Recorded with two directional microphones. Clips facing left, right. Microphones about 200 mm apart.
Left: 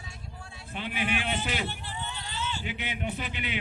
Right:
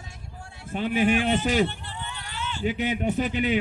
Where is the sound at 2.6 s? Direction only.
40° right (ahead or behind).